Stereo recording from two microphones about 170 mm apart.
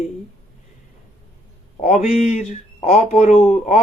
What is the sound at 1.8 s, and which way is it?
Speech, 45° left (ahead or behind).